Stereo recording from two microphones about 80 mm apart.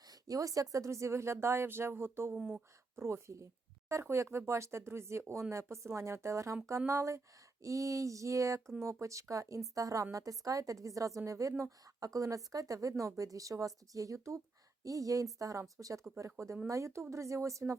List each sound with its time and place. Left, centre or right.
0.1 s a woman's voice: right